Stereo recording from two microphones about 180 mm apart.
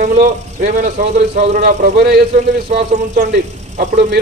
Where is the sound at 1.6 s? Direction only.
65° right (ahead or behind).